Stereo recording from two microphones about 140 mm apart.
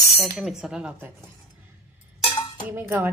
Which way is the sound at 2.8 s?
15° right (ahead or behind).